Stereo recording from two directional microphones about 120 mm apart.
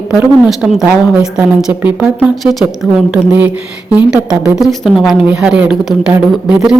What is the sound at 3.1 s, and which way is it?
Speech, 15° right (ahead or behind).